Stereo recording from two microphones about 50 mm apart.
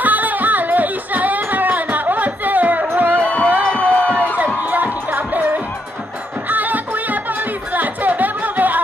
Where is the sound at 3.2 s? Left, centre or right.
Left.